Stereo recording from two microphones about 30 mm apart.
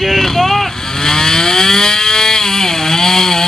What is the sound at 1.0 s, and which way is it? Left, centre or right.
Vehicle, centre.